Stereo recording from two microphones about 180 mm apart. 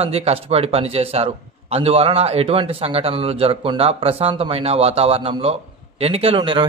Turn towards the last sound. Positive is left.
turn(degrees=-30)  # may be behind; listen again after turning